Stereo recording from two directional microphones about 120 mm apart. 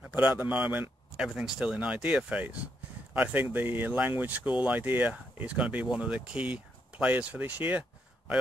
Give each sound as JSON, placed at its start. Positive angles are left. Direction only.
{"t": 0.1, "sound": "speech", "side_deg": -10}